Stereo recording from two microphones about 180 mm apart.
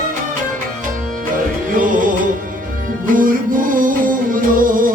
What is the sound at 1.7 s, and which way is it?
Music, 50° right (ahead or behind).